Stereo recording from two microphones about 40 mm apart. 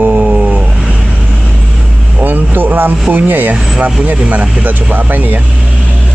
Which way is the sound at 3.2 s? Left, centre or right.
Right.